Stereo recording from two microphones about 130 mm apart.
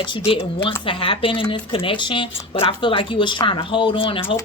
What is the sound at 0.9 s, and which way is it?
A woman's voice, 45° left (ahead or behind).